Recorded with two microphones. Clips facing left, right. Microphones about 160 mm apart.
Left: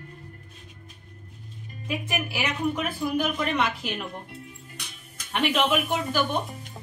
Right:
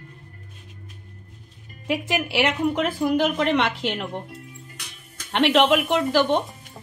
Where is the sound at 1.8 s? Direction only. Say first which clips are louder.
Right 5 dB; 85° right.